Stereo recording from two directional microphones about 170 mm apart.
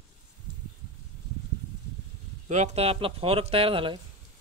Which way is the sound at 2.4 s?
40° right (ahead or behind).